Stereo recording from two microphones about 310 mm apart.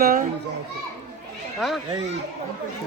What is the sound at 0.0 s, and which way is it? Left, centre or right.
Speech, right.